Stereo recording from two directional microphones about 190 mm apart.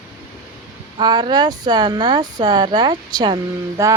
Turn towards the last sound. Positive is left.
turn(degrees=-20)  # may be behind; listen again after turning